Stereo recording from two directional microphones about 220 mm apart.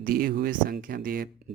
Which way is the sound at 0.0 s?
40° right (ahead or behind).